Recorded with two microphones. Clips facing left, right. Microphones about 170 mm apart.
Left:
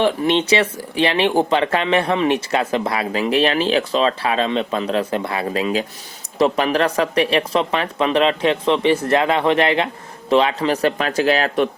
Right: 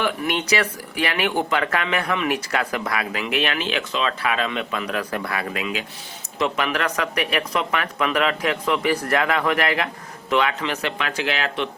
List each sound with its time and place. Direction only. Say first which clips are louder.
0.0 s speech: left 7 dB; 30° left (ahead or behind)